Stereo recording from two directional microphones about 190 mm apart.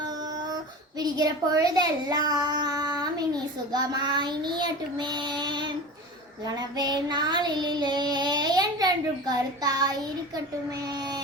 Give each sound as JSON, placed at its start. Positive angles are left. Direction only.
{"t": 0.9, "sound": "speech", "side_deg": -20}